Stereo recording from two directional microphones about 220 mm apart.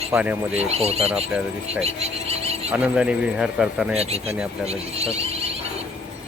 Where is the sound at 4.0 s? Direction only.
30° right (ahead or behind).